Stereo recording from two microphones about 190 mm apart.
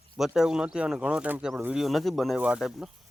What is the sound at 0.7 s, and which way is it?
Speech, 5° right (ahead or behind).